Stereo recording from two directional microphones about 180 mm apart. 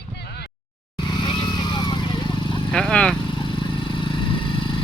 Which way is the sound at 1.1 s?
25° left (ahead or behind).